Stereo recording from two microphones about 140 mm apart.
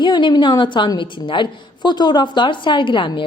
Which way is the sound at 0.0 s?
35° left (ahead or behind).